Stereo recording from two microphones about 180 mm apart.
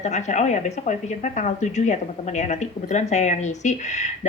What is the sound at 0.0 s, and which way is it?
A woman's voice, 40° left (ahead or behind).